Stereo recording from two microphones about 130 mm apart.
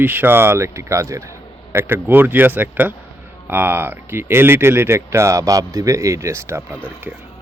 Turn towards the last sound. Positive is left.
turn(degrees=-20)  # may be behind; listen again after turning